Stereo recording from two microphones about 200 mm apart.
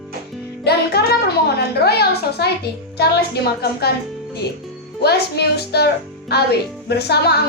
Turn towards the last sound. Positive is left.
turn(degrees=55)  # may be behind; listen again after turning